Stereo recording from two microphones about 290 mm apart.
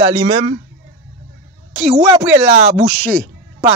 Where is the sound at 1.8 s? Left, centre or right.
Centre.